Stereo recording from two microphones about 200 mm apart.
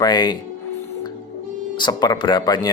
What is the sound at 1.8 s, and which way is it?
Speech, 20° left (ahead or behind).